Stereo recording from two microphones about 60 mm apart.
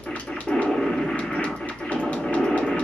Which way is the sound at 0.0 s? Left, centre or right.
Centre.